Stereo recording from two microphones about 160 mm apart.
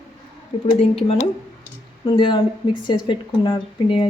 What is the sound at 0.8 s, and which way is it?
Speech, 40° left (ahead or behind).